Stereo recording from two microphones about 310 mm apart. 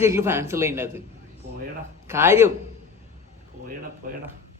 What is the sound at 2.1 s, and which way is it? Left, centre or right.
Speech, centre.